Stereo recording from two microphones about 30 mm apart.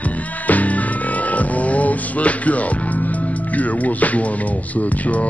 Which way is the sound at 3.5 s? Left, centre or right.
Left.